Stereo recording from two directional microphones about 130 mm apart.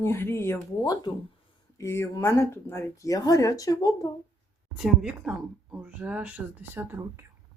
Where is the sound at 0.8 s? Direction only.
35° left (ahead or behind).